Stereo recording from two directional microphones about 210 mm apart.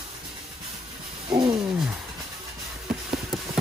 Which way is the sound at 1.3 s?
20° right (ahead or behind).